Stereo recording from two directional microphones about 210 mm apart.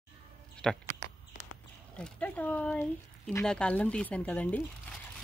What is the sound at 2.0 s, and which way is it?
Speech, 5° left (ahead or behind).